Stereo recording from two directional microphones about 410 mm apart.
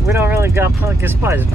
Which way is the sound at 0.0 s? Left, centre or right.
Centre.